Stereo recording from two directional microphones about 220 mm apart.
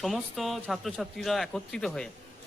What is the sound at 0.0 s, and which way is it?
A man's voice, centre (ahead or behind).